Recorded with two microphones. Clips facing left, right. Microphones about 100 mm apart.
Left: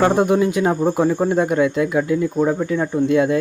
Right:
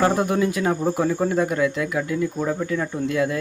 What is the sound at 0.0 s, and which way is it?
Speech, 25° left (ahead or behind).